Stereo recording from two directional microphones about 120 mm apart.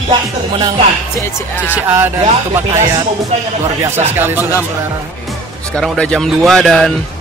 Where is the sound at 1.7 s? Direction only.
15° right (ahead or behind).